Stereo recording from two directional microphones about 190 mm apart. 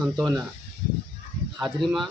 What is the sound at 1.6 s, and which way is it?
Speech, centre (ahead or behind).